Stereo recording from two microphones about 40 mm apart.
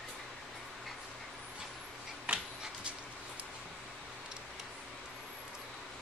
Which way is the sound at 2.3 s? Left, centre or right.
Right.